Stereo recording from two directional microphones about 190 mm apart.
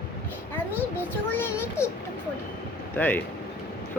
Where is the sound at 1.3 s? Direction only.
10° left (ahead or behind).